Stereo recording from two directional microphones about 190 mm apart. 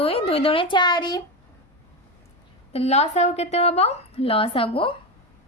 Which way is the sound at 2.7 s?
35° left (ahead or behind).